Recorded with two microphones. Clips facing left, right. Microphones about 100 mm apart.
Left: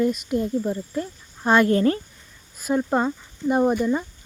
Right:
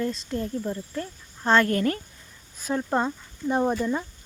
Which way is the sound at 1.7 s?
25° left (ahead or behind).